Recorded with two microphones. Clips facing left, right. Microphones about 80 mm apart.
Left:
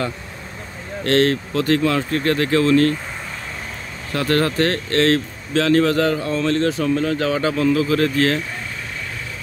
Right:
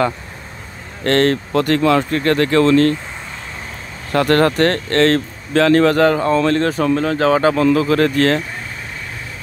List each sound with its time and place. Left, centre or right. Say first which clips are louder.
1.0 s speech: right 2 dB; right
2.0 s speech: right 3 dB; right
4.1 s speech: right 5 dB; right